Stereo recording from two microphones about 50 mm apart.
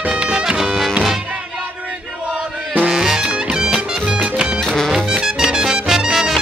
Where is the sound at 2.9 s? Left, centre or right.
Centre.